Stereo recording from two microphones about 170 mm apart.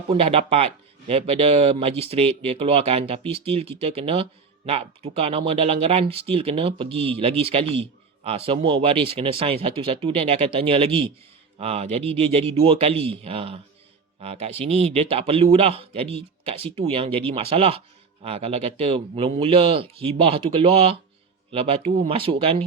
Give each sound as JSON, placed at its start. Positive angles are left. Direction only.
{"t": 0.1, "sound": "speech", "side_deg": -35}